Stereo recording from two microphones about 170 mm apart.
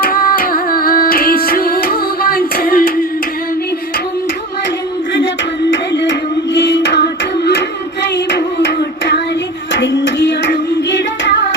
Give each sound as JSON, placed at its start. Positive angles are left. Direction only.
{"t": 0.0, "sound": "music", "side_deg": 60}
{"t": 5.7, "sound": "a sound", "side_deg": 90}
{"t": 8.0, "sound": "hands", "side_deg": 90}
{"t": 9.7, "sound": "child singing", "side_deg": 90}